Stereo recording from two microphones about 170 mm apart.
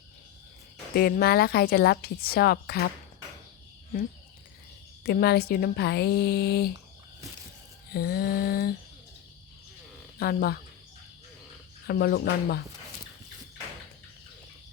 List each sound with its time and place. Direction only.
0.9 s a woman's voice: 65° left (ahead or behind)
5.0 s speech: 65° left (ahead or behind)
7.9 s a woman's voice: 65° left (ahead or behind)
10.2 s a woman's voice: 65° left (ahead or behind)
11.9 s speech: 65° left (ahead or behind)